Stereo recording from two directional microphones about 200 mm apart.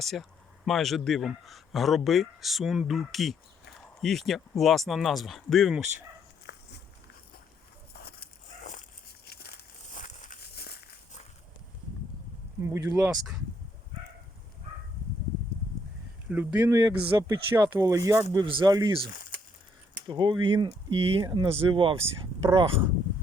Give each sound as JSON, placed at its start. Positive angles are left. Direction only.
{"t": 0.0, "sound": "a man's voice", "side_deg": 0}
{"t": 6.4, "sound": "a sound", "side_deg": 60}
{"t": 9.2, "sound": "crumpling", "side_deg": 50}
{"t": 12.6, "sound": "speech", "side_deg": -15}
{"t": 16.3, "sound": "speech", "side_deg": -10}
{"t": 20.1, "sound": "speech", "side_deg": -20}